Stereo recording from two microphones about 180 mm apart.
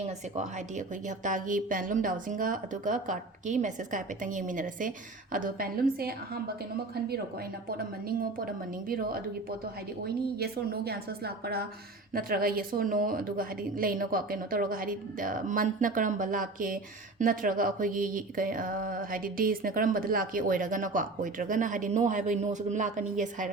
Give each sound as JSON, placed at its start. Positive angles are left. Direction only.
{"t": 0.3, "sound": "a woman's voice", "side_deg": -40}
{"t": 7.7, "sound": "a woman's voice", "side_deg": -55}